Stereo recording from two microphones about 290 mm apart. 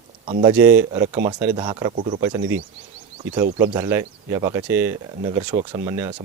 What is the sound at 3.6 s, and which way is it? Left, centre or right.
Speech, centre.